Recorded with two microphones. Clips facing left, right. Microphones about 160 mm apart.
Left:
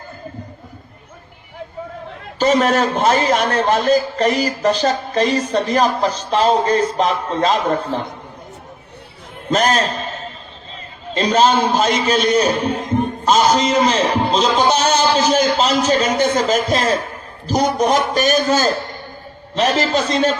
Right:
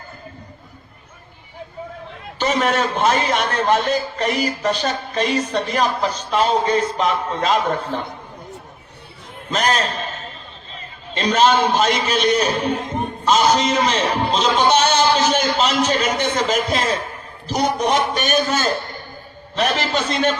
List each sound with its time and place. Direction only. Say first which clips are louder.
2.4 s a man's voice: left 4 dB; 40° left (ahead or behind)
9.5 s a man's voice: left 4 dB; 40° left (ahead or behind)
11.1 s a man's voice: left 2 dB; 35° left (ahead or behind)